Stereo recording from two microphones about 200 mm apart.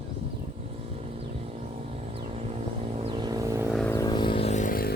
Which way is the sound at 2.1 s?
30° right (ahead or behind).